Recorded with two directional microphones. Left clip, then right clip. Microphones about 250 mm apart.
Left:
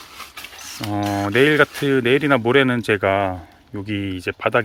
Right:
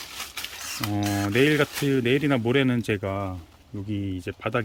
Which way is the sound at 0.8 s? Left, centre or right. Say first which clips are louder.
Left 5 dB; centre.